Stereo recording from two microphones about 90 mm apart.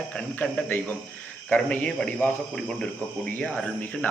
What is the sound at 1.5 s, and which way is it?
A man's voice, 15° left (ahead or behind).